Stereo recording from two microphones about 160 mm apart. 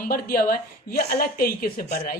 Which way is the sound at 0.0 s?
65° left (ahead or behind).